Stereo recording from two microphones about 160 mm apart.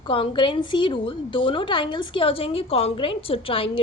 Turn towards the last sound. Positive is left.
turn(degrees=35)  # may be behind; listen again after turning